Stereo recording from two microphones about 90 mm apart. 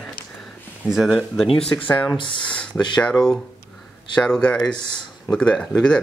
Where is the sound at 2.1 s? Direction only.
65° left (ahead or behind).